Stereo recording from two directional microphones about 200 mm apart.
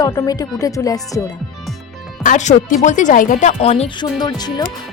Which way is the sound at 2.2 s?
40° left (ahead or behind).